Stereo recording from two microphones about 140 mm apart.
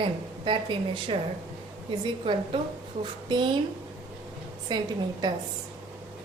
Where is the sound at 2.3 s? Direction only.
40° right (ahead or behind).